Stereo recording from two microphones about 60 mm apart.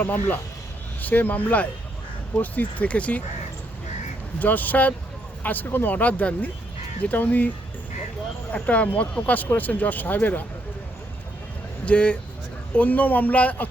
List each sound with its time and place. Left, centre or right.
0.0 s speech: left
4.4 s speech: left
8.5 s speech: left
11.9 s speech: centre